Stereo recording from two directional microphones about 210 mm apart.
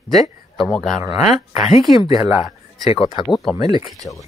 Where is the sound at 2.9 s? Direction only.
25° left (ahead or behind).